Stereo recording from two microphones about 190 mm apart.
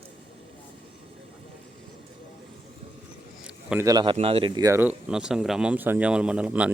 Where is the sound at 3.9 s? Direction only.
20° right (ahead or behind).